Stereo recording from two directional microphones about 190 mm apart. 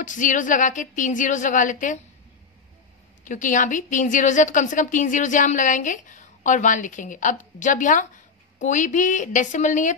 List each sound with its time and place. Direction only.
0.0 s a woman's voice: 40° left (ahead or behind)
3.3 s a woman's voice: 40° left (ahead or behind)